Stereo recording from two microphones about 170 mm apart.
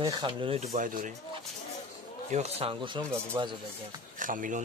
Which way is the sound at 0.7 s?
50° right (ahead or behind).